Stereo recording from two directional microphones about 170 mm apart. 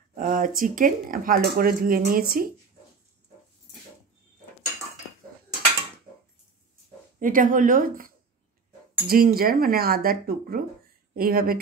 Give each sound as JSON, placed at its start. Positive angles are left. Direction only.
{"t": 0.1, "sound": "speech", "side_deg": -50}
{"t": 7.2, "sound": "speech", "side_deg": -55}